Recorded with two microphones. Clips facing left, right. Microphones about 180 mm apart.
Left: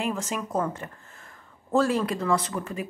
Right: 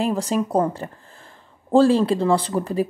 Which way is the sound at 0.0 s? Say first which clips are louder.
Right 8 dB; 35° right (ahead or behind).